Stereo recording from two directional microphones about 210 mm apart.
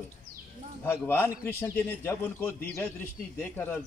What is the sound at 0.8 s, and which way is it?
A man's voice, 10° left (ahead or behind).